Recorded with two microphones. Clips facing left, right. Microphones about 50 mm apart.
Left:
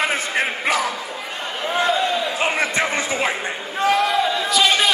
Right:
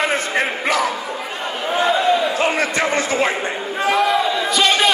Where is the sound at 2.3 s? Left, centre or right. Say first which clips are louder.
Right 2 dB; centre.